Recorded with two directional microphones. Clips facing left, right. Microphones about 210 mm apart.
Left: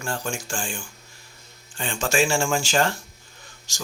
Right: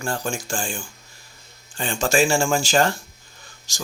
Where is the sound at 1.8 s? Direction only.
35° right (ahead or behind).